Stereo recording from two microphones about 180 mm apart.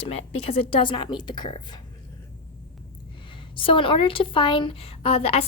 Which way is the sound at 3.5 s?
30° left (ahead or behind).